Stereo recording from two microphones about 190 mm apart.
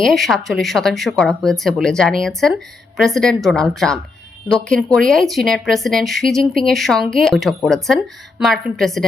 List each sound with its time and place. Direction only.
0.0 s speech: centre (ahead or behind)